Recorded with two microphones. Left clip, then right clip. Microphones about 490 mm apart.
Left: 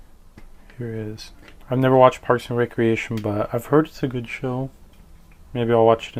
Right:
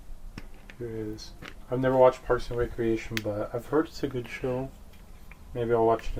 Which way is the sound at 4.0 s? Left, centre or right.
Left.